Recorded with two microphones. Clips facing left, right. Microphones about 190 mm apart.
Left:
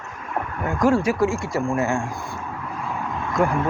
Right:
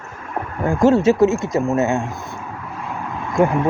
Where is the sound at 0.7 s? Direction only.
25° right (ahead or behind).